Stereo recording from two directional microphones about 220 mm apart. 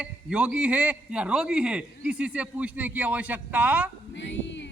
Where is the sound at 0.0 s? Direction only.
5° right (ahead or behind).